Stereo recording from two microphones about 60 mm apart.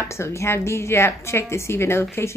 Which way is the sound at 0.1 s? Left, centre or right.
Left.